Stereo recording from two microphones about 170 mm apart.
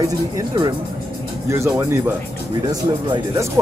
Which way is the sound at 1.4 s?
15° right (ahead or behind).